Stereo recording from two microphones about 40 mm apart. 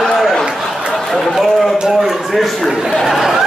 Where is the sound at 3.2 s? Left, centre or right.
Centre.